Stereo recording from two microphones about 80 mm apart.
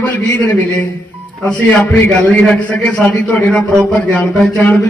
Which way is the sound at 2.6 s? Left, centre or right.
Centre.